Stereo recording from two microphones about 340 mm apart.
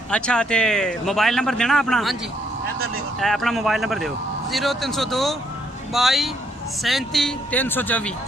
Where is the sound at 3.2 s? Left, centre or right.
Centre.